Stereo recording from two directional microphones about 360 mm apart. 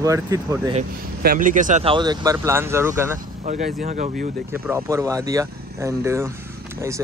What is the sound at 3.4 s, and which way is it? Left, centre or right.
Speech, centre.